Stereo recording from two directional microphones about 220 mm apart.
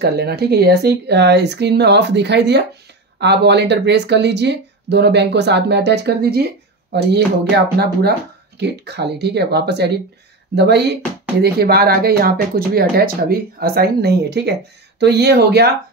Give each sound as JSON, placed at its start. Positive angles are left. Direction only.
{"t": 0.0, "sound": "speech", "side_deg": -50}